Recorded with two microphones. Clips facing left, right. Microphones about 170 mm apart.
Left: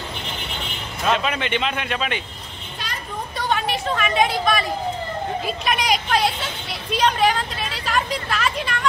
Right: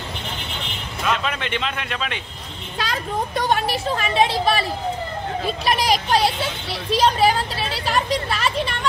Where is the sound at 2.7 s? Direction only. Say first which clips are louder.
Right 7 dB; 90° right.